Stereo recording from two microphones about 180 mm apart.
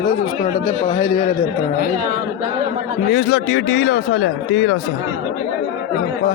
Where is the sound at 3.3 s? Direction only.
90° left.